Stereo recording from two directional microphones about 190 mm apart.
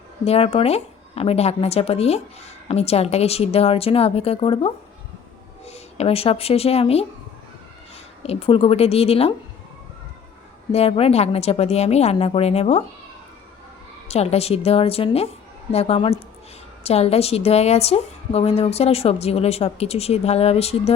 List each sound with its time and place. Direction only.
0.3 s a woman's voice: 30° left (ahead or behind)
8.2 s a woman's voice: 30° left (ahead or behind)
10.7 s a woman's voice: 30° left (ahead or behind)
14.1 s a woman's voice: 35° left (ahead or behind)